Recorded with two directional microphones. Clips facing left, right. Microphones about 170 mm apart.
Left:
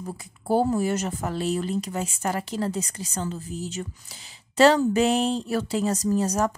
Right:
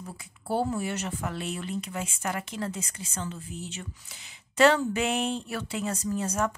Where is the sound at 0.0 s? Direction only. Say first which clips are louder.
Left 7 dB; 40° left (ahead or behind).